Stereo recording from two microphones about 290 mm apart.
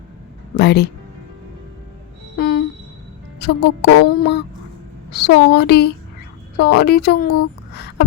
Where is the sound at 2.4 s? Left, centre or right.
Left.